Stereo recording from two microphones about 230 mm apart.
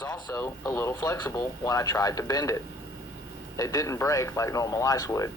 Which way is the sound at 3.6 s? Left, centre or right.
Centre.